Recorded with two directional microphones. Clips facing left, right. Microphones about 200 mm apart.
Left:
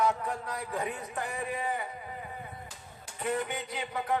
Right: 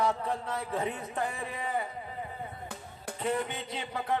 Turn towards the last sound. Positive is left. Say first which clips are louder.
# even
turn(degrees=-25)  # may be behind; listen again after turning